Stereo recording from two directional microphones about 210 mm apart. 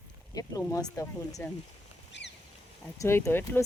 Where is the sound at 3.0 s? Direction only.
10° left (ahead or behind).